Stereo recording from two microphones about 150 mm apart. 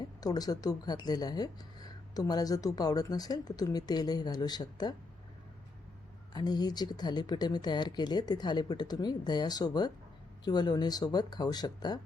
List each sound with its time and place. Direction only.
0.0 s speech: 25° left (ahead or behind)
6.3 s speech: 25° left (ahead or behind)